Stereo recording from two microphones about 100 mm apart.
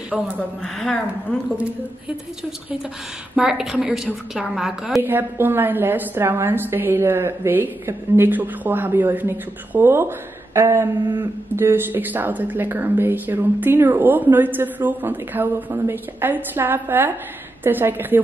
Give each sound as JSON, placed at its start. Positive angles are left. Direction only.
{"t": 0.1, "sound": "a woman's voice", "side_deg": -10}
{"t": 0.6, "sound": "a woman's voice", "side_deg": 5}
{"t": 3.3, "sound": "a woman's voice", "side_deg": -5}
{"t": 5.0, "sound": "speech", "side_deg": -20}